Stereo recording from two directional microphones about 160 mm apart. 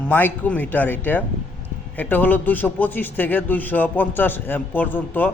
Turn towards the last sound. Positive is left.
turn(degrees=10)  # may be behind; listen again after turning